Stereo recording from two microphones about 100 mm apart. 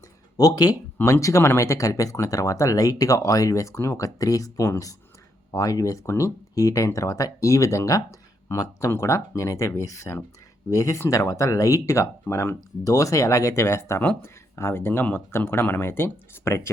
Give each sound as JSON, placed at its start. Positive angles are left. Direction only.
{"t": 0.3, "sound": "speech", "side_deg": 40}